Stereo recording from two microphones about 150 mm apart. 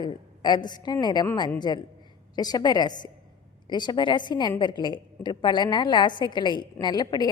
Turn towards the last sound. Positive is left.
turn(degrees=25)  # may be behind; listen again after turning